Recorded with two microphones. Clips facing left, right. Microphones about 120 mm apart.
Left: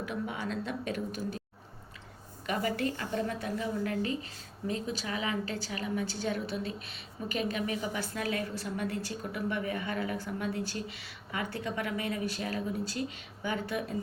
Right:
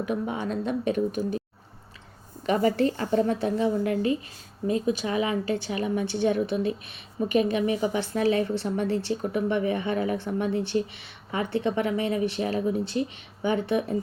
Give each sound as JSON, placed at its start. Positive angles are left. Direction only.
{"t": 0.3, "sound": "speech", "side_deg": -20}
{"t": 2.5, "sound": "a woman's voice", "side_deg": -30}